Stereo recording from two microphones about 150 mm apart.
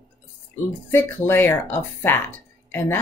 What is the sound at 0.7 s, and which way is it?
Speech, 15° left (ahead or behind).